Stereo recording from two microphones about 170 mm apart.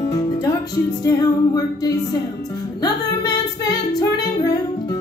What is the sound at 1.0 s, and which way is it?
Music, 20° left (ahead or behind).